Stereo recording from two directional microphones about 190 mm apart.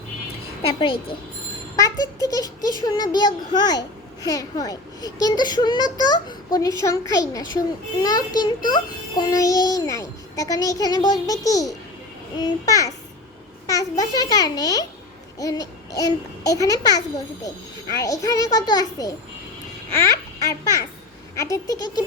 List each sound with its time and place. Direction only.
0.6 s a child's voice: 25° left (ahead or behind)